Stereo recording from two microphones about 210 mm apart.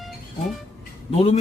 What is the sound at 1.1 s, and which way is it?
Speech, 30° left (ahead or behind).